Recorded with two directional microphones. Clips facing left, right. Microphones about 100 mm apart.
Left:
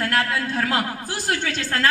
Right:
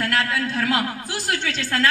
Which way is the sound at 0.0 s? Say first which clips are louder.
Even; 35° left (ahead or behind).